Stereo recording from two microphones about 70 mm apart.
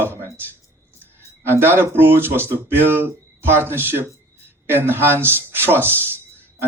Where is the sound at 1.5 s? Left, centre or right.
Right.